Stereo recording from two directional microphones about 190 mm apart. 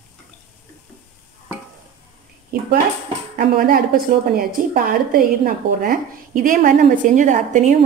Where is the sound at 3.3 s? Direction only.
45° right (ahead or behind).